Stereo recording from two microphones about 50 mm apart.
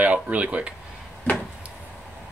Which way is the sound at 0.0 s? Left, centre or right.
Right.